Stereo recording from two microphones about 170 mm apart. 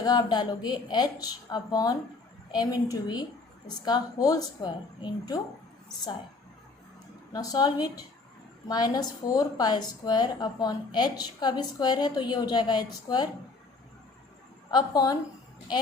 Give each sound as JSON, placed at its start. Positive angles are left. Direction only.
{"t": 0.0, "sound": "a woman's voice", "side_deg": 25}
{"t": 7.3, "sound": "a woman's voice", "side_deg": 20}
{"t": 14.7, "sound": "a woman's voice", "side_deg": 25}